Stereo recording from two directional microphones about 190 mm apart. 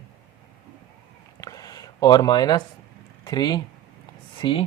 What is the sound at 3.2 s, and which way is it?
Speech, 20° left (ahead or behind).